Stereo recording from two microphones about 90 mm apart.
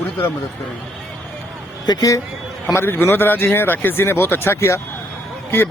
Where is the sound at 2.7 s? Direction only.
25° left (ahead or behind).